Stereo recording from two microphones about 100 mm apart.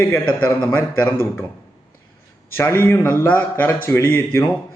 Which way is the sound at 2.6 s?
25° left (ahead or behind).